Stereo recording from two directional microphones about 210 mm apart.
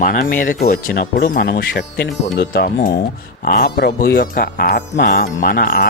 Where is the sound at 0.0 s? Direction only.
40° left (ahead or behind).